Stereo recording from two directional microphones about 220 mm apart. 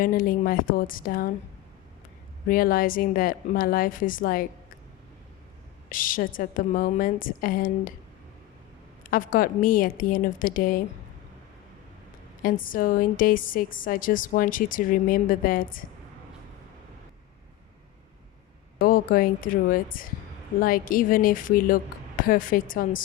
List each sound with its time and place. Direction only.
0.0 s a woman's voice: 40° left (ahead or behind)
2.5 s a woman's voice: 40° left (ahead or behind)
5.9 s a woman's voice: 40° left (ahead or behind)
9.0 s a woman's voice: 40° left (ahead or behind)
12.4 s a woman's voice: 40° left (ahead or behind)
18.8 s a woman's voice: 40° left (ahead or behind)